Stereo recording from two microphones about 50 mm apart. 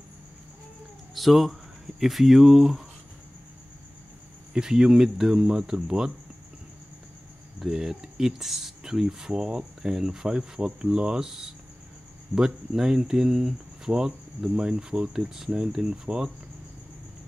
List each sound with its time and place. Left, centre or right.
1.1 s speech: centre
4.6 s speech: centre
7.5 s speech: centre